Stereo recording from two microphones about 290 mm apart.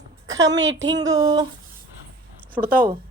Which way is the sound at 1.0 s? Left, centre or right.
Centre.